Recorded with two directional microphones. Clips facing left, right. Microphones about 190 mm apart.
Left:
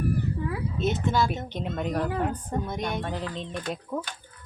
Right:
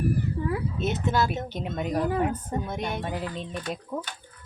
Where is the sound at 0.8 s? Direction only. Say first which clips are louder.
Left 2 dB; 5° right (ahead or behind).